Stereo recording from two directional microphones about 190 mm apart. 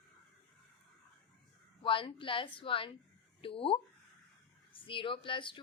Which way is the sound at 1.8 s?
25° left (ahead or behind).